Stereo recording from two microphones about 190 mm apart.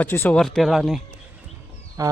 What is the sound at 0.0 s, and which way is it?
Speech, 10° left (ahead or behind).